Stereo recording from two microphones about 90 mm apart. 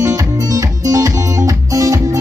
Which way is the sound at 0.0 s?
40° right (ahead or behind).